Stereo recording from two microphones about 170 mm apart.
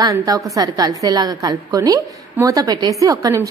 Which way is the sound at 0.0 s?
20° right (ahead or behind).